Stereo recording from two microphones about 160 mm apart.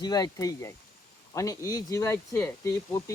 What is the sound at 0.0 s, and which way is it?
Speech, 25° left (ahead or behind).